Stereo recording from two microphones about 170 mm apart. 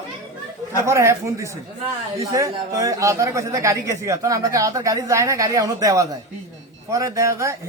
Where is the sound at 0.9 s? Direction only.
15° right (ahead or behind).